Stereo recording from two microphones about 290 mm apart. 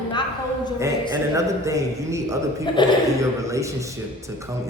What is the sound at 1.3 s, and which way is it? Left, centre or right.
A man's voice, centre.